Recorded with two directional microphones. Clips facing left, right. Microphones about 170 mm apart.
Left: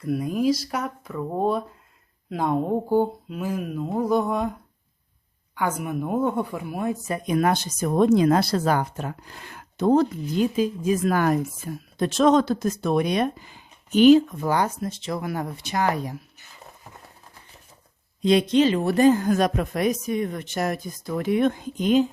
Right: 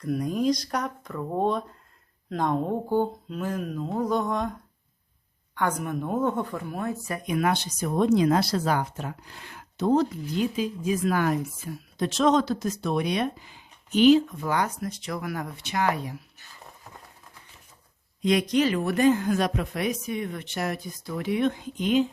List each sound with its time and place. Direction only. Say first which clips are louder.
0.0 s speech: left 2 dB; 5° left (ahead or behind)
5.5 s speech: left 1 dB; 5° left (ahead or behind)
7.3 s speech: left 3 dB; 40° left (ahead or behind)
14.4 s speech: left 3 dB; 30° left (ahead or behind)
18.2 s speech: left 4 dB; 30° left (ahead or behind)